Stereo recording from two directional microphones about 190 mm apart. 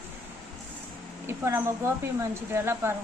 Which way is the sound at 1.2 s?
10° right (ahead or behind).